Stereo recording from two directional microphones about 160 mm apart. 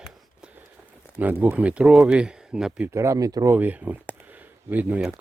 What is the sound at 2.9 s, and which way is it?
Speech, 20° right (ahead or behind).